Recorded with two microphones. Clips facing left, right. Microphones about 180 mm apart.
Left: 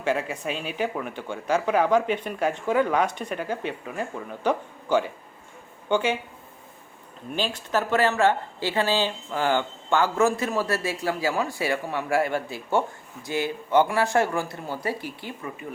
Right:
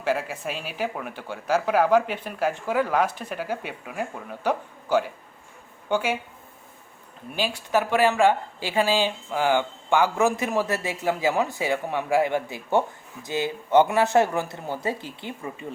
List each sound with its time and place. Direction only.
0.0 s speech: 5° right (ahead or behind)
7.3 s speech: 10° right (ahead or behind)